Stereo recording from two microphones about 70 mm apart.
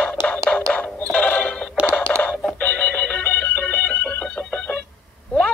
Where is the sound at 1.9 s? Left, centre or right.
Centre.